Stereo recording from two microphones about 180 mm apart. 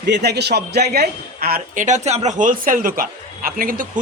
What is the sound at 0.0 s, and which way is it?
A man's voice, 65° right (ahead or behind).